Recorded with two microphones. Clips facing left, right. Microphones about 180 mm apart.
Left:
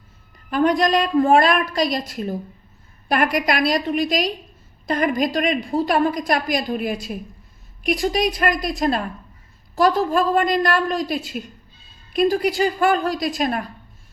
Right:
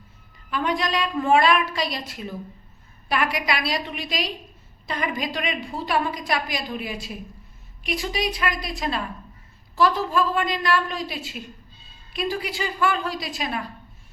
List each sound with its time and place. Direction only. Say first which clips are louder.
0.5 s a woman's voice: left 7 dB; 45° left (ahead or behind)